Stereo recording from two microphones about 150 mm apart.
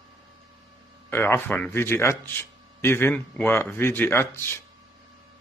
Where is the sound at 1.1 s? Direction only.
15° left (ahead or behind).